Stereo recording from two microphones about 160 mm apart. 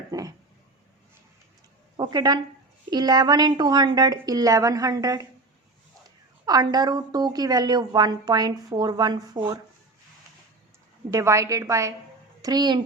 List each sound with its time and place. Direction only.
0.1 s a woman's voice: 20° right (ahead or behind)
2.0 s a woman's voice: 25° right (ahead or behind)
6.4 s a woman's voice: 25° right (ahead or behind)
11.1 s a woman's voice: 20° right (ahead or behind)